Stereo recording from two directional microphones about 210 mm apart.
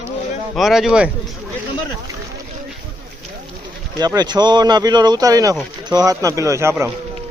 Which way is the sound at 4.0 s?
20° right (ahead or behind).